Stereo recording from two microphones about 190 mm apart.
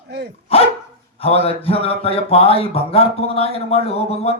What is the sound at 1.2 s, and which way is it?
Speech, 30° left (ahead or behind).